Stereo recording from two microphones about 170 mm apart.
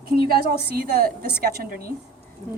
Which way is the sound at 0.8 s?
65° right (ahead or behind).